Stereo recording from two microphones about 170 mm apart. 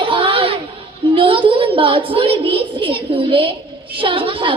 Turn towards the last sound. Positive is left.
turn(degrees=-30)  # may be behind; listen again after turning